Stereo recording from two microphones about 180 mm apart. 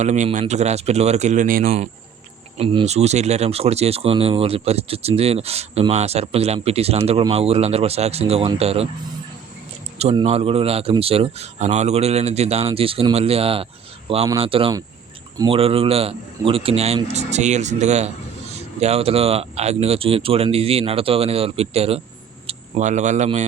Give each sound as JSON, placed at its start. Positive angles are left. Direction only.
{"t": 0.0, "sound": "speech", "side_deg": -40}
{"t": 2.6, "sound": "speech", "side_deg": -35}
{"t": 10.0, "sound": "speech", "side_deg": -35}